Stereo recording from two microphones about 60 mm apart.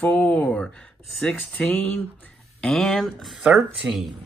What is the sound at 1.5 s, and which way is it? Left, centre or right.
Speech, left.